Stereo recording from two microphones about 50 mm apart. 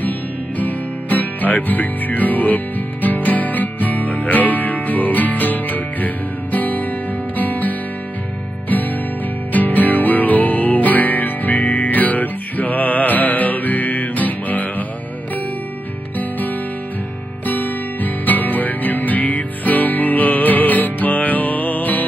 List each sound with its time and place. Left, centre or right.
0.6 s music: left
9.5 s music: left
17.5 s music: left